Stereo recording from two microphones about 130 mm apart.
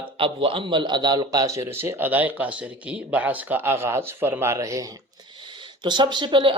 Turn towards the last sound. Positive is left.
turn(degrees=-40)  # may be behind; listen again after turning